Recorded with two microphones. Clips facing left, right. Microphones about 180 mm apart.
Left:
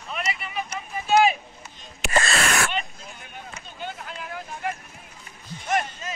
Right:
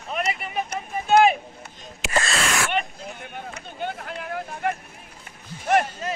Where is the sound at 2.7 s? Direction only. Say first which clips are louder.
Right 4 dB; 55° right (ahead or behind).